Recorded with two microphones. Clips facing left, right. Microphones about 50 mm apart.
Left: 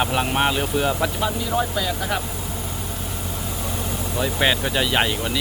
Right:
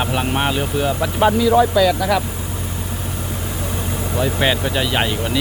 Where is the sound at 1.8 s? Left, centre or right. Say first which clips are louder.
Right 8 dB; right.